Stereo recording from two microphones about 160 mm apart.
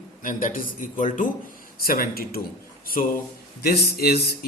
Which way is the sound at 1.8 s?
65° left (ahead or behind).